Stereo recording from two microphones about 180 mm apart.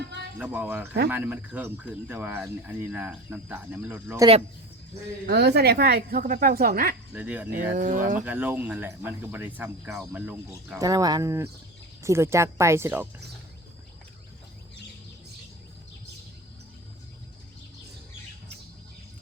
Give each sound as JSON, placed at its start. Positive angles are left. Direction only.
{"t": 0.3, "sound": "speech", "side_deg": -5}
{"t": 5.2, "sound": "speech", "side_deg": -65}
{"t": 7.1, "sound": "speech", "side_deg": -10}
{"t": 7.8, "sound": "speech", "side_deg": -45}
{"t": 8.2, "sound": "speech", "side_deg": -10}